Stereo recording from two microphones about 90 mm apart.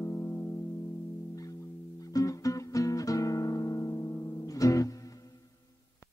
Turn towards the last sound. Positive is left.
turn(degrees=40)  # may be behind; listen again after turning